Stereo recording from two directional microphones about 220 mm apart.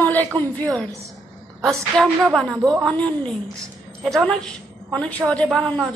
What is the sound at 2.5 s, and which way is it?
Speech, 15° right (ahead or behind).